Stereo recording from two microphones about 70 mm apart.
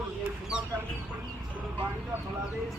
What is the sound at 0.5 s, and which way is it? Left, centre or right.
Speech, centre.